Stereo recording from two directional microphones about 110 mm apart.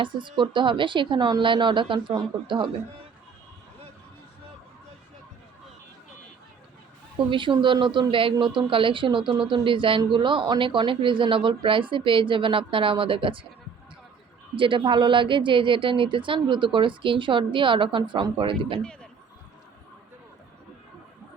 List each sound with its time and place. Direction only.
0.0 s speech: 45° right (ahead or behind)
7.3 s speech: 50° right (ahead or behind)
14.5 s speech: 50° right (ahead or behind)